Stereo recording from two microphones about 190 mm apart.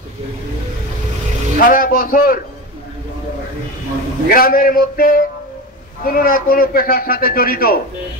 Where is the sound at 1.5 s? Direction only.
45° left (ahead or behind).